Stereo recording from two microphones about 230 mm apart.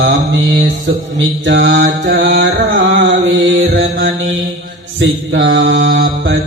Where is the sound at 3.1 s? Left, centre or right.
Right.